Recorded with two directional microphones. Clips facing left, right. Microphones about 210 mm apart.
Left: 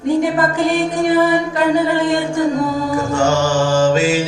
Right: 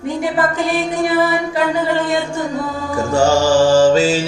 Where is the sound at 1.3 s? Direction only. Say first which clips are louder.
Left 3 dB; 10° left (ahead or behind).